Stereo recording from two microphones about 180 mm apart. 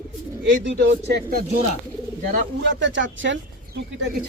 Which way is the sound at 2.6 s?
90° right.